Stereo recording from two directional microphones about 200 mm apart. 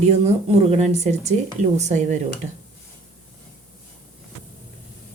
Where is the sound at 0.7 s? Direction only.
35° right (ahead or behind).